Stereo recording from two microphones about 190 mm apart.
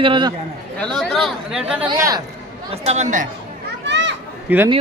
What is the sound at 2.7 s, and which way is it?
Speech, 35° right (ahead or behind).